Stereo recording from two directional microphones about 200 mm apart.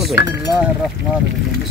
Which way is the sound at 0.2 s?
60° left (ahead or behind).